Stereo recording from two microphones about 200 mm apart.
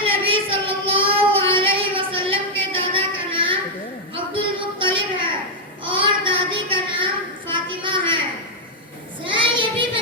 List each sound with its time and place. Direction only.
0.0 s child singing: 25° right (ahead or behind)
4.1 s a sound: 25° right (ahead or behind)
5.8 s child singing: 25° right (ahead or behind)
9.2 s child singing: 25° right (ahead or behind)